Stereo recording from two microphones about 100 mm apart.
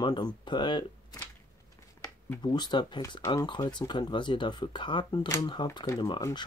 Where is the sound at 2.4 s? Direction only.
45° left (ahead or behind).